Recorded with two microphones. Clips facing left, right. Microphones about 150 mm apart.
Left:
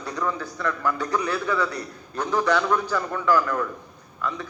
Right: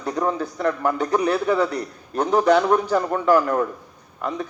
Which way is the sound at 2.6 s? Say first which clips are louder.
Right 5 dB; 45° right (ahead or behind).